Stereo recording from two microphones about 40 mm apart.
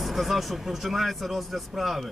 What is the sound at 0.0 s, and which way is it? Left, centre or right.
Speech, centre.